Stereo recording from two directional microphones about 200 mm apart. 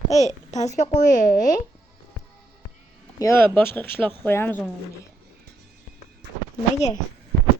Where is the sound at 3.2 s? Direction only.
15° left (ahead or behind).